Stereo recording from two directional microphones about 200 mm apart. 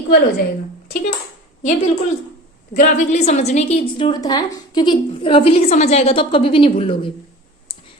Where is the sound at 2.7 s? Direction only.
35° left (ahead or behind).